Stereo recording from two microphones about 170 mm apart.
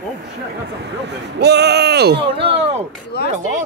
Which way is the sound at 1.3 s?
80° right.